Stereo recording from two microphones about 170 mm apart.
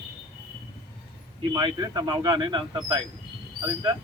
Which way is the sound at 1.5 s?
25° right (ahead or behind).